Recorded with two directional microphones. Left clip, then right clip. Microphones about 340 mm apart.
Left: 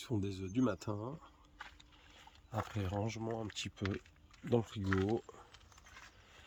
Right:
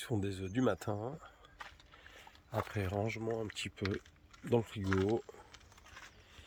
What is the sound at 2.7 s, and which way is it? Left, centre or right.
Speech, centre.